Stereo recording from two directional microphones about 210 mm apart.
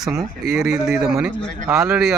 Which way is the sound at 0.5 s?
Centre (ahead or behind).